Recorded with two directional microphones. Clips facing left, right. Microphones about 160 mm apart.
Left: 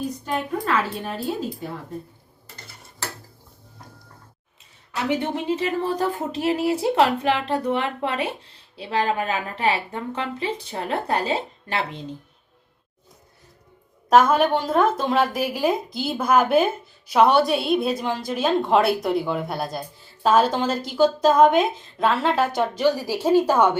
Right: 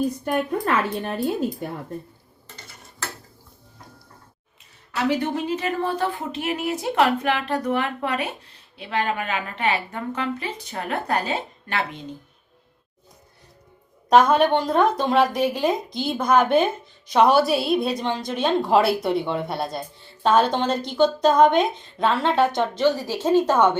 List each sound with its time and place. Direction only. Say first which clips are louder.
0.3 s a woman's voice: left 1 dB; 55° right (ahead or behind)
4.9 s speech: right 1 dB; 25° left (ahead or behind)
14.1 s a woman's voice: right 1 dB; 5° left (ahead or behind)